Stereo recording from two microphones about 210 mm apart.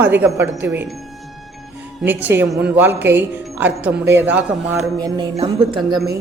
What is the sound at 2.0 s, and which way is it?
A man's voice, 10° right (ahead or behind).